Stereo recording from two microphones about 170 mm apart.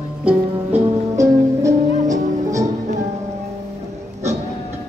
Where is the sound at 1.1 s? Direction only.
20° right (ahead or behind).